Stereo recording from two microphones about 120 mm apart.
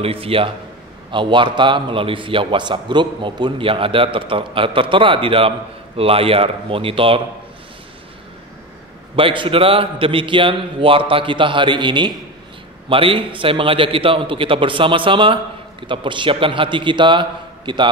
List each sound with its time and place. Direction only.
0.0 s a man's voice: 50° right (ahead or behind)
9.1 s a man's voice: 45° right (ahead or behind)